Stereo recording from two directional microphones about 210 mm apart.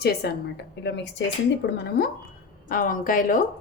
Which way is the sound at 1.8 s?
45° left (ahead or behind).